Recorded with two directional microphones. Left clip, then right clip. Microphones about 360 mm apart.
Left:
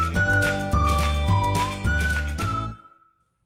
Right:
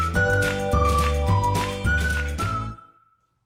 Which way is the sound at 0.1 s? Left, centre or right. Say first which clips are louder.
Even; centre.